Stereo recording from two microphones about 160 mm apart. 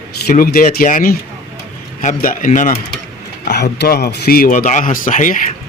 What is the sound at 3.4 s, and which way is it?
Speech, 90° left.